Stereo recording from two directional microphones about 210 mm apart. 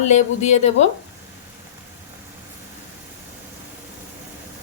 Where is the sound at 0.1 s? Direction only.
35° left (ahead or behind).